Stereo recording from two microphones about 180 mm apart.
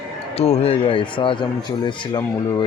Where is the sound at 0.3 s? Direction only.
35° left (ahead or behind).